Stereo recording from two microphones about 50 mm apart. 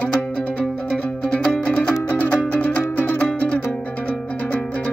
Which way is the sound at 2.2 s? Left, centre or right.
Left.